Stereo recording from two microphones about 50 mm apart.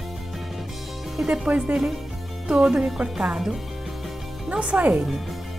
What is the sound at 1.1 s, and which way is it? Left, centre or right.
Speech, centre.